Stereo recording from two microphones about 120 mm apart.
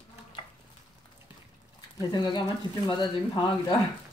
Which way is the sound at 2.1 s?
40° left (ahead or behind).